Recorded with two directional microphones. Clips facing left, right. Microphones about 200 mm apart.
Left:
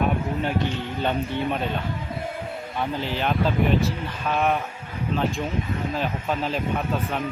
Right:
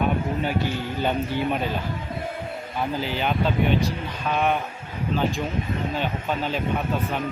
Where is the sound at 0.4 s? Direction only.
5° right (ahead or behind).